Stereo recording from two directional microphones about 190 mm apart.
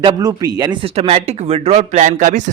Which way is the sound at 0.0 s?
20° right (ahead or behind).